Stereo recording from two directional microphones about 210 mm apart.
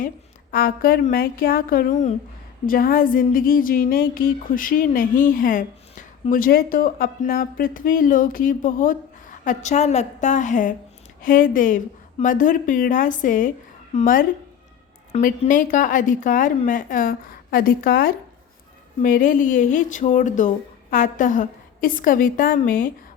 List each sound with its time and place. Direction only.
0.5 s a woman's voice: 45° left (ahead or behind)